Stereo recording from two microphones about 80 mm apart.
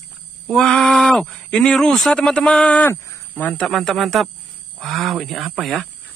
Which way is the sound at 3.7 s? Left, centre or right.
Centre.